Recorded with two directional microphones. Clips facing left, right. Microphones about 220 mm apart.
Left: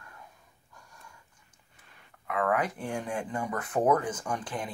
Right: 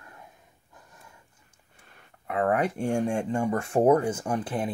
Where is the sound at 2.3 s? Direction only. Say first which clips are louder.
Right 4 dB; 30° right (ahead or behind).